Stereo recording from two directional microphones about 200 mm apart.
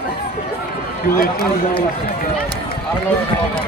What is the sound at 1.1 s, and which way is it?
Speech, 50° left (ahead or behind).